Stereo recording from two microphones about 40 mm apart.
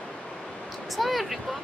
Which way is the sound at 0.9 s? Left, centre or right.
Centre.